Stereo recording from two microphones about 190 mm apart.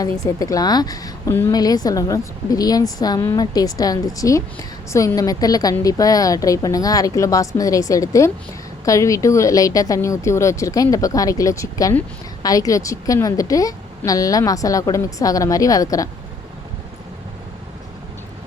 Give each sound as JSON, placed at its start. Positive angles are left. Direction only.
{"t": 0.0, "sound": "a woman's voice", "side_deg": 20}